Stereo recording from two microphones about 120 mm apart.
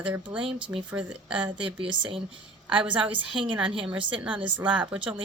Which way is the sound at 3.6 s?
45° right (ahead or behind).